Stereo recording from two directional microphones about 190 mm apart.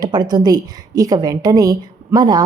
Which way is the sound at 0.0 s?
20° right (ahead or behind).